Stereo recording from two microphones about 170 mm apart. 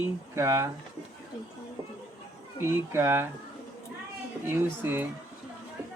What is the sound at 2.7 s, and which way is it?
Speech, 15° right (ahead or behind).